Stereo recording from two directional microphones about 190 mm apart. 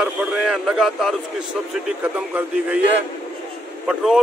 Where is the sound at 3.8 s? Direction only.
5° right (ahead or behind).